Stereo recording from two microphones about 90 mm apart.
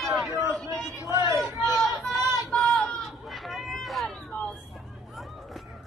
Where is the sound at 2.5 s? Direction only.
5° left (ahead or behind).